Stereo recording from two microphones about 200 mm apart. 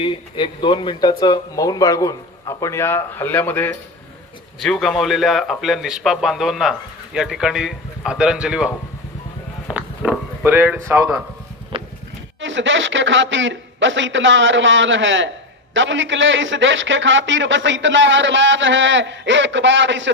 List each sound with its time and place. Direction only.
0.0 s a man's voice: 25° left (ahead or behind); by 11.2 s 10° right (ahead or behind)
11.7 s clip-clop: 30° right (ahead or behind)
12.4 s a man's voice: 70° right (ahead or behind)